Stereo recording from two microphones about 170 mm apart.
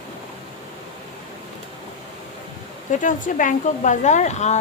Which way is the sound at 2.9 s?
50° left (ahead or behind).